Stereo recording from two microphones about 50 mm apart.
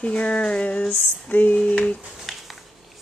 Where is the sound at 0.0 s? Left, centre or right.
Left.